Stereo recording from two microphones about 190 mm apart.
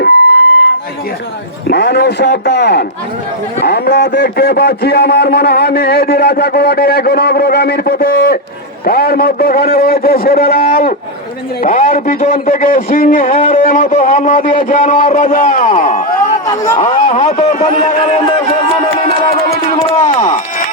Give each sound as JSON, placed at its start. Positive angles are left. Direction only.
{"t": 1.7, "sound": "a man's voice", "side_deg": 60}
{"t": 16.5, "sound": "speech", "side_deg": 20}
{"t": 16.8, "sound": "speech", "side_deg": 35}
{"t": 20.0, "sound": "chop", "side_deg": 40}